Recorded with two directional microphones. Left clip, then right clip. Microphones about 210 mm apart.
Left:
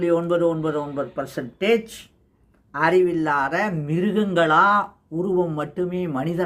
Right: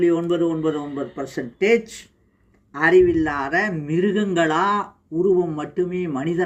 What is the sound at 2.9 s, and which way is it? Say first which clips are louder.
Speech: right 4 dB; 15° left (ahead or behind).